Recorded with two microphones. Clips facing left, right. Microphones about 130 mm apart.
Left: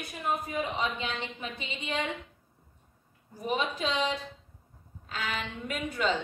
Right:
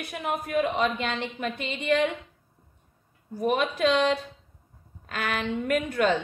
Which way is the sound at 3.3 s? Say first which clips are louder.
Right 6 dB; 65° right (ahead or behind).